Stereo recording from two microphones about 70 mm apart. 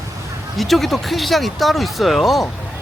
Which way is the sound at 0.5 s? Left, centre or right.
Centre.